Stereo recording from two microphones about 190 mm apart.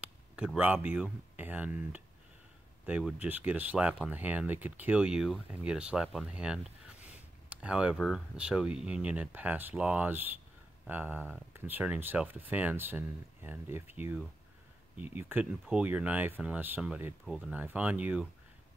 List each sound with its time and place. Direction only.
0.0 s speech: 5° right (ahead or behind)